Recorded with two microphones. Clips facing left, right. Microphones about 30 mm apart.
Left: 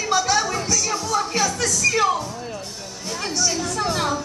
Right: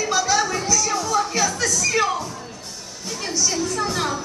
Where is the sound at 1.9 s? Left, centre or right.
Centre.